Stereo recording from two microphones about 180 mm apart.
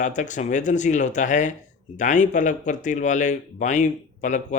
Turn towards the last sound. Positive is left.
turn(degrees=40)  # may be behind; listen again after turning